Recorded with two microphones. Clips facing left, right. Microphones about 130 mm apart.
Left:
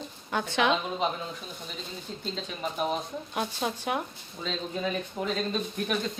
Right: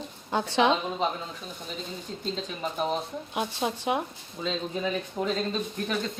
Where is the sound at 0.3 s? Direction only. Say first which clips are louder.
Right 3 dB; 30° right (ahead or behind).